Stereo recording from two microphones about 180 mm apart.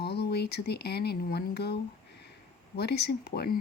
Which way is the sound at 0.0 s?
65° left (ahead or behind).